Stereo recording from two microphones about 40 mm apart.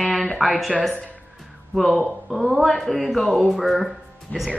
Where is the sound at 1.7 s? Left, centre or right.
Centre.